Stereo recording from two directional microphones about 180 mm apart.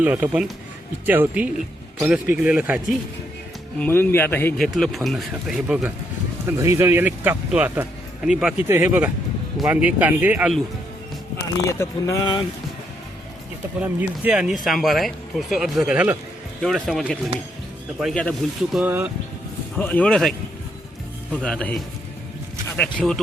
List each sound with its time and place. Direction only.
0.0 s speech: 10° right (ahead or behind)
3.8 s a man's voice: 10° left (ahead or behind)
4.6 s speech: centre (ahead or behind)
11.7 s a man's voice: 15° left (ahead or behind)
13.7 s speech: 5° right (ahead or behind)
18.8 s speech: 10° right (ahead or behind)
19.7 s speech: 10° left (ahead or behind)
21.3 s a man's voice: 5° left (ahead or behind)
22.8 s speech: 5° left (ahead or behind)